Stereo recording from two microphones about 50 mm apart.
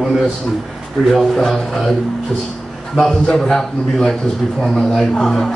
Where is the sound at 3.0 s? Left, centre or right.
Centre.